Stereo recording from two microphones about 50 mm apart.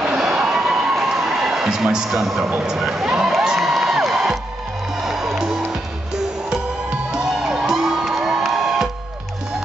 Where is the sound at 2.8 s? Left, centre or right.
Centre.